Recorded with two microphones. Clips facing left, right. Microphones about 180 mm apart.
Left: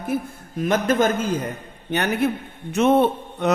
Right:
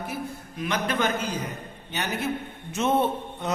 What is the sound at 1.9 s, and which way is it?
A man's voice, 60° left (ahead or behind).